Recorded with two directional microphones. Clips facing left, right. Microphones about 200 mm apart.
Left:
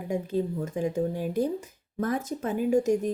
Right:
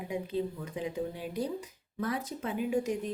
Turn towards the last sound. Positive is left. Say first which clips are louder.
# left 7 dB
turn(degrees=45)  # may be behind; listen again after turning